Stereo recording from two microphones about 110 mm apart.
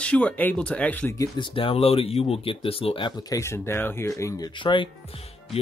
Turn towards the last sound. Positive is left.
turn(degrees=55)  # may be behind; listen again after turning